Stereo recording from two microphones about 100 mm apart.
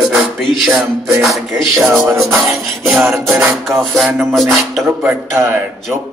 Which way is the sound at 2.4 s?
Centre (ahead or behind).